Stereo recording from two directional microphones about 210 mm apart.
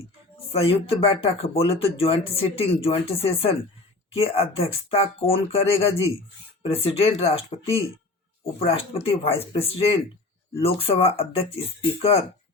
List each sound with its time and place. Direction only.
0.6 s speech: 25° left (ahead or behind)